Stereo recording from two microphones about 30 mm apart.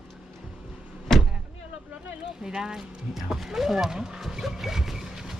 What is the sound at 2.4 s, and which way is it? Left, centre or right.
Speech, centre.